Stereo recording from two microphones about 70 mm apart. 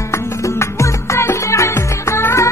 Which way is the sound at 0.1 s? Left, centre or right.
Left.